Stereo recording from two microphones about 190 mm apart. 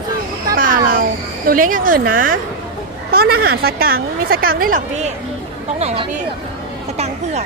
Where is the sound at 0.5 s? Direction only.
45° right (ahead or behind).